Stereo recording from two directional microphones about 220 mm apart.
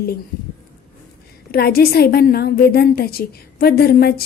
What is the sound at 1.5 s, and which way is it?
A woman's voice, 45° left (ahead or behind).